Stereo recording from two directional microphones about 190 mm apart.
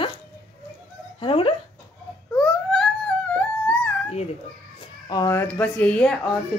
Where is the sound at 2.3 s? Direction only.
Centre (ahead or behind).